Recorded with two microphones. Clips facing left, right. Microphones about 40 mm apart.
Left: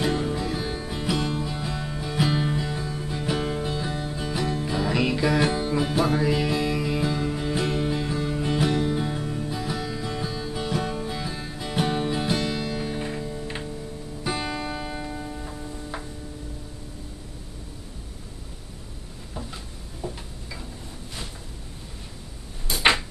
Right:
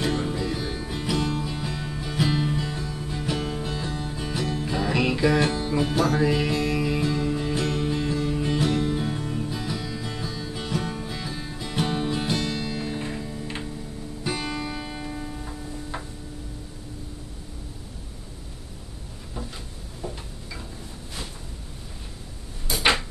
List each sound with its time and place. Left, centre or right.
0.0 s music: centre
5.4 s music: centre
7.6 s music: centre
19.3 s a sound: centre